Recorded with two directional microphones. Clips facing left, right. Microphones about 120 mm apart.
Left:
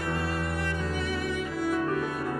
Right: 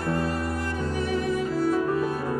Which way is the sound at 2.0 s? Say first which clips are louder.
Right 4 dB; 35° right (ahead or behind).